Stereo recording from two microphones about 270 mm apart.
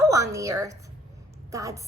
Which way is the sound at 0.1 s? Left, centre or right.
Centre.